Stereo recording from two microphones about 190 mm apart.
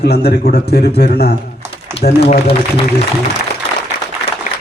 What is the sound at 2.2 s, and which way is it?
Speech, 30° left (ahead or behind).